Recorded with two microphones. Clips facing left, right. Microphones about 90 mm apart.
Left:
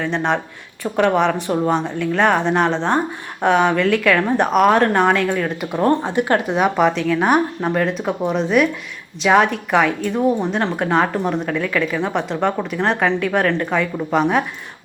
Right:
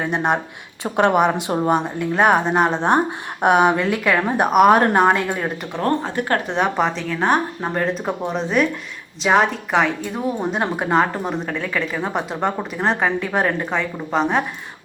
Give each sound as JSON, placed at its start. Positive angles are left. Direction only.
{"t": 0.0, "sound": "a woman's voice", "side_deg": -10}
{"t": 5.7, "sound": "speech", "side_deg": 15}
{"t": 6.5, "sound": "a woman's voice", "side_deg": 5}
{"t": 13.7, "sound": "a woman's voice", "side_deg": 0}